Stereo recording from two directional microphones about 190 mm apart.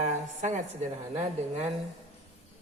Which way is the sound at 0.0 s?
40° right (ahead or behind).